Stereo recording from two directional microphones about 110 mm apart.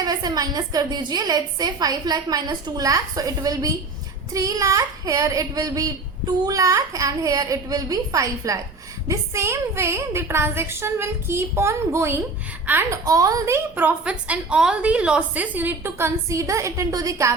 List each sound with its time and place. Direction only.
0.0 s a woman's voice: 35° right (ahead or behind)
13.7 s a woman's voice: 15° right (ahead or behind); by 17.3 s 30° right (ahead or behind)